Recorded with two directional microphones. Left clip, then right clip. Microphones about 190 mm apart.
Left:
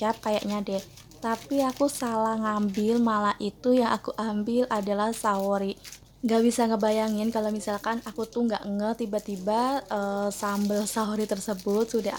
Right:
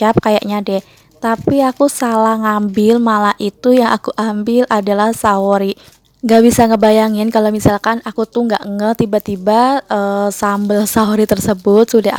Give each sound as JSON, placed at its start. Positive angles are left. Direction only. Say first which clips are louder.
{"t": 0.0, "sound": "a woman's voice", "louder": "right 15 dB", "side_deg": -45}